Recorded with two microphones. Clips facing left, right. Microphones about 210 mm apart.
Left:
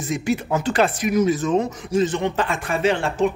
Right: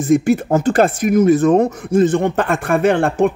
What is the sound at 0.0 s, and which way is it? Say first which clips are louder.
A man's voice: right 9 dB; 50° right (ahead or behind).